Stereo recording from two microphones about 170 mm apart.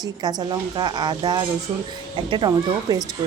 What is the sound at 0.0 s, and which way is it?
A woman's voice, 25° right (ahead or behind).